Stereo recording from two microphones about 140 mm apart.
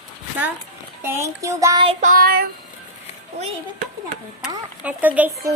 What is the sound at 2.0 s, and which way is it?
Child singing, 80° right.